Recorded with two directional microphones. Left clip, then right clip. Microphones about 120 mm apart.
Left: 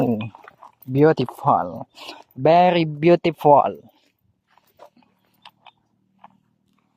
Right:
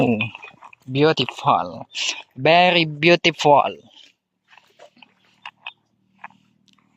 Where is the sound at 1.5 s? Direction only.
35° left (ahead or behind).